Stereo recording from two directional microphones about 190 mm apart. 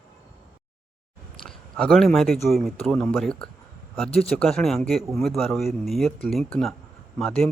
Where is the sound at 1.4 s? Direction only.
5° left (ahead or behind).